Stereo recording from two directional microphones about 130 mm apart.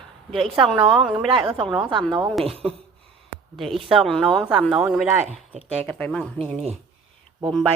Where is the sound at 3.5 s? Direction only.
Centre (ahead or behind).